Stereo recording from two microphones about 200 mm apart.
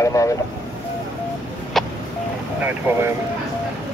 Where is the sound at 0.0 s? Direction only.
15° left (ahead or behind).